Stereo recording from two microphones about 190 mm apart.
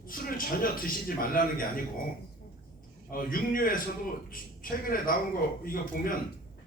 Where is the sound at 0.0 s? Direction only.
50° left (ahead or behind).